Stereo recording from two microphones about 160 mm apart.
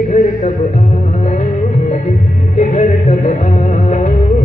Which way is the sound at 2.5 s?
50° left (ahead or behind).